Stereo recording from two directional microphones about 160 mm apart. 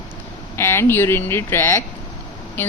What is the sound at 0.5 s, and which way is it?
A woman's voice, 15° left (ahead or behind).